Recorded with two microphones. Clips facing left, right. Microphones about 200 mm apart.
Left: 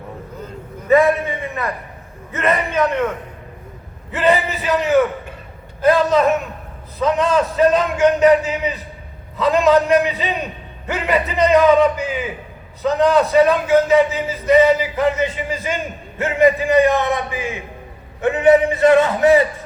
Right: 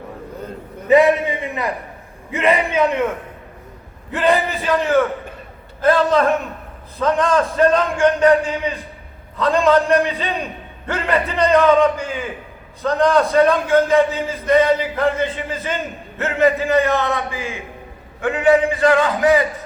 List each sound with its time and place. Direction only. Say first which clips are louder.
0.9 s a sound: right 1 dB; 15° right (ahead or behind)
2.3 s a man's voice: right 2 dB; 10° right (ahead or behind)
4.1 s a man's voice: even; 5° left (ahead or behind); by 19.5 s 25° left (ahead or behind)